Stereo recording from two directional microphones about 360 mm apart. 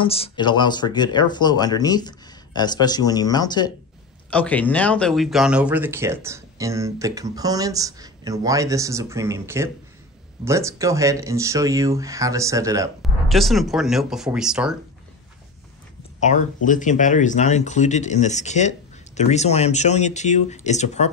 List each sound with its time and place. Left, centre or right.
0.0 s speech: centre
16.2 s speech: centre